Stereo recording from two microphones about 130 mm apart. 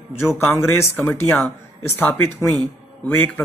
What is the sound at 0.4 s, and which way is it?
Speech, 15° left (ahead or behind).